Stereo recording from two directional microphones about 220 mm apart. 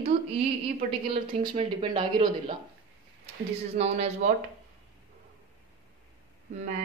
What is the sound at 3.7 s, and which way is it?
Speech, 30° right (ahead or behind).